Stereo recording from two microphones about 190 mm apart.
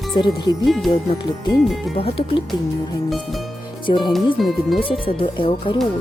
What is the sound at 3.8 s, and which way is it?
Speech, 25° left (ahead or behind).